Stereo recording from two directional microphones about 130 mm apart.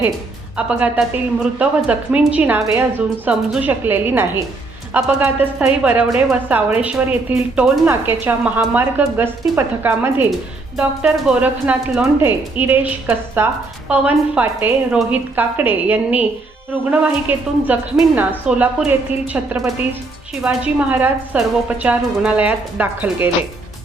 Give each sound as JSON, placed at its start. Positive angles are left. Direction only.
{"t": 0.5, "sound": "a woman's voice", "side_deg": -10}